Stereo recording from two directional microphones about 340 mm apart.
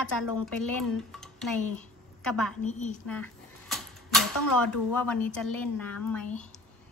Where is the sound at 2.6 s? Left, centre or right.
Left.